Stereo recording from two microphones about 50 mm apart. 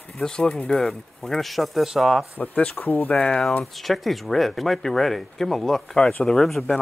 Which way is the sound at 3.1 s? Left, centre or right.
Centre.